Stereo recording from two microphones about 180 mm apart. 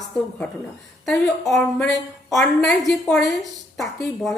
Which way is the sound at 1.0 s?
Centre (ahead or behind).